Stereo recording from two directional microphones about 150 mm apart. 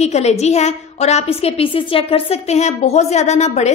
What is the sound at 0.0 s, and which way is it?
A woman's voice, 45° left (ahead or behind).